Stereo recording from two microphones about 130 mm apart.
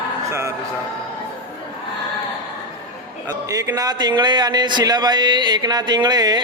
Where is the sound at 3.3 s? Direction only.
25° right (ahead or behind).